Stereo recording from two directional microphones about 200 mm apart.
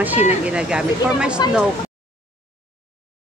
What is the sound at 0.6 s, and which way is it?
Speech, 5° right (ahead or behind).